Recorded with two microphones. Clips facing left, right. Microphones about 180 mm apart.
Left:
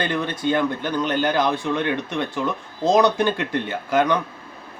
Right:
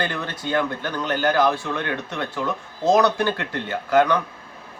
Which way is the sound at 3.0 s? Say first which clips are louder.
Left 2 dB; 15° left (ahead or behind).